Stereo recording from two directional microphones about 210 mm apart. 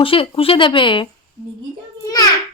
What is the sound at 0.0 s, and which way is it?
Speech, 25° left (ahead or behind).